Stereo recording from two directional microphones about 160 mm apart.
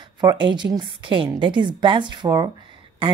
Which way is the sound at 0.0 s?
25° right (ahead or behind).